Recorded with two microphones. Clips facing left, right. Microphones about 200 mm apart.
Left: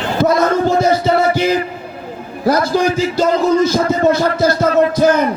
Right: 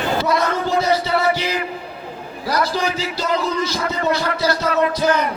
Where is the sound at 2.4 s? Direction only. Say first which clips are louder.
Left 7 dB; 50° left (ahead or behind).